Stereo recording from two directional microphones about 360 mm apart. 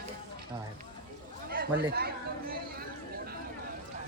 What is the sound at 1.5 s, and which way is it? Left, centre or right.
Speech, right.